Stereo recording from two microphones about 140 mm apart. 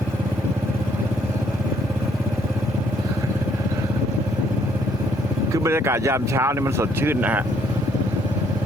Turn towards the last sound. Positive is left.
turn(degrees=-10)  # may be behind; listen again after turning